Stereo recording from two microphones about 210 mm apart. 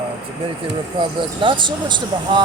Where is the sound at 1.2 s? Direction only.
25° right (ahead or behind).